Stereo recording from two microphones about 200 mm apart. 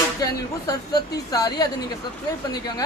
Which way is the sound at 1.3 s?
20° left (ahead or behind).